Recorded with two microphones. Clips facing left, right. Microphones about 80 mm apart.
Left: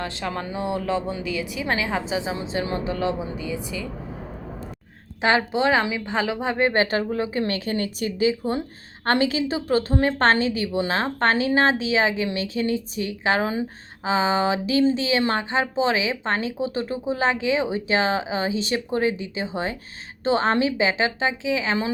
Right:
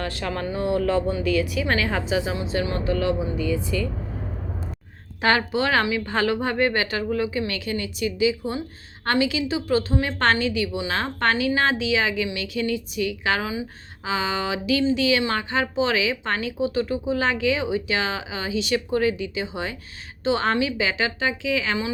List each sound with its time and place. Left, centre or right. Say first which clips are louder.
0.0 s speech: right 1 dB; left
5.2 s a woman's voice: left 1 dB; left